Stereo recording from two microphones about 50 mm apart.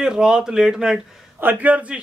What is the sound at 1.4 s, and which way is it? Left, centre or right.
Speech, right.